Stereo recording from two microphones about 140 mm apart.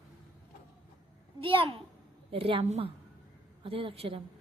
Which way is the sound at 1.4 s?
40° right (ahead or behind).